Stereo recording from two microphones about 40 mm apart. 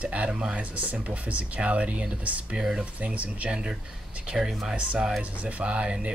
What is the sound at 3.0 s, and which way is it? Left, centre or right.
Speech, right.